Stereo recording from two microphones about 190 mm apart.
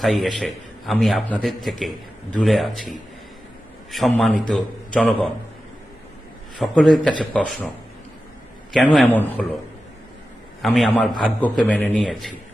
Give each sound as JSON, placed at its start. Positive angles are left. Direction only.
{"t": 0.0, "sound": "a man's voice", "side_deg": 0}
{"t": 4.2, "sound": "a man's voice", "side_deg": 5}
{"t": 6.6, "sound": "a man's voice", "side_deg": 0}
{"t": 8.7, "sound": "a man's voice", "side_deg": 5}
{"t": 10.6, "sound": "a man's voice", "side_deg": 0}